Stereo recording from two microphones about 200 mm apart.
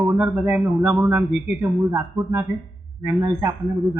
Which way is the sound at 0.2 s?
5° right (ahead or behind).